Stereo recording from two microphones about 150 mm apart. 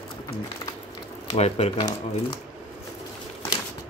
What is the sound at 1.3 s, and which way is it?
Speech, 45° left (ahead or behind).